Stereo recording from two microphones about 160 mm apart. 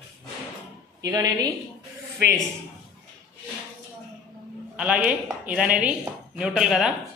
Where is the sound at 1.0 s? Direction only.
20° right (ahead or behind).